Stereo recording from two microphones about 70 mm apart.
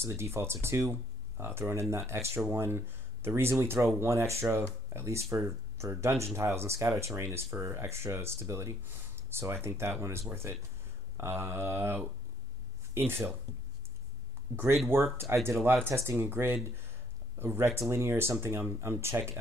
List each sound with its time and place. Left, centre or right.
0.0 s speech: right
14.9 s speech: right